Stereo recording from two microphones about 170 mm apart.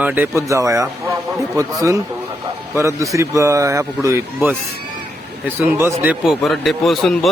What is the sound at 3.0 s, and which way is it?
Speech, 20° right (ahead or behind).